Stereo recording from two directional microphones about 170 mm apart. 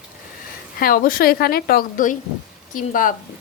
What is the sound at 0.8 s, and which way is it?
A woman's voice, 60° left (ahead or behind).